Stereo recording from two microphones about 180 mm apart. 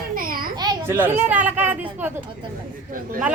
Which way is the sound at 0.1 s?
55° right (ahead or behind).